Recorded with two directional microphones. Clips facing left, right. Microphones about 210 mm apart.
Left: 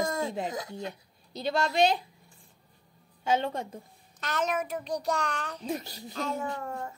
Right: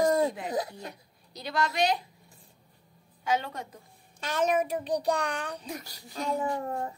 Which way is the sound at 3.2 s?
25° left (ahead or behind).